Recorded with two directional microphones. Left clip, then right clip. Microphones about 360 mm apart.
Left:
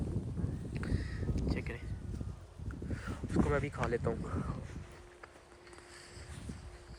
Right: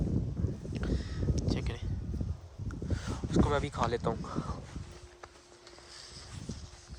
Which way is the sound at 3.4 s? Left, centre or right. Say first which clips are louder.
Right 3 dB; centre.